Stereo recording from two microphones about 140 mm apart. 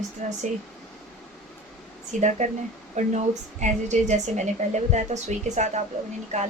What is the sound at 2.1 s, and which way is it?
A woman's voice, 60° right (ahead or behind).